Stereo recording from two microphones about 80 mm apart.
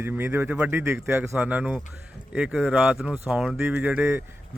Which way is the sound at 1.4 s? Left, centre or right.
Centre.